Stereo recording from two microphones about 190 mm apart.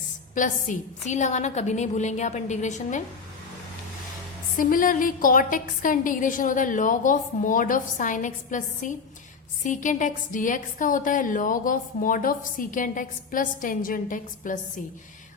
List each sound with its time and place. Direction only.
0.3 s a woman's voice: 40° left (ahead or behind)
4.5 s a woman's voice: 45° left (ahead or behind)